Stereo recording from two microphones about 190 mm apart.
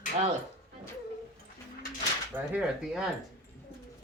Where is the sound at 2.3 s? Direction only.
5° right (ahead or behind).